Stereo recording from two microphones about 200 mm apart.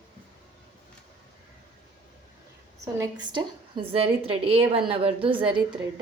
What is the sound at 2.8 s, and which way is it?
Speech, 20° right (ahead or behind).